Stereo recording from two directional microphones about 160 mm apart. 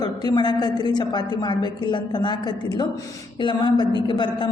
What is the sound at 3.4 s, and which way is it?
Speech, 30° left (ahead or behind).